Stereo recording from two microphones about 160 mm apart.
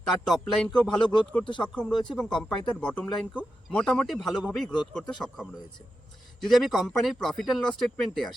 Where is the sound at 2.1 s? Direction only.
5° left (ahead or behind).